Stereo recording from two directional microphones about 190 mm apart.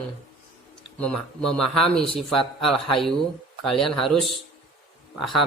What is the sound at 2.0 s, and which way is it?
Speech, 30° left (ahead or behind).